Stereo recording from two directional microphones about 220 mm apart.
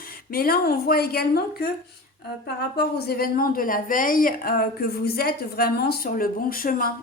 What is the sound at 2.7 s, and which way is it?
A woman's voice, 45° left (ahead or behind).